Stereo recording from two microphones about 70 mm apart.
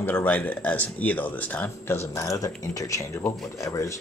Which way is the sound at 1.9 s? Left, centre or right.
Left.